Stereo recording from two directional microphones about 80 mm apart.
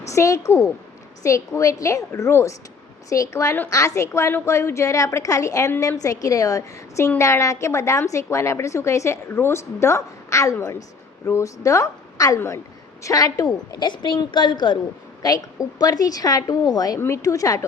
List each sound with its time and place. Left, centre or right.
0.1 s a woman's voice: left
15.2 s a woman's voice: left
17.0 s a woman's voice: left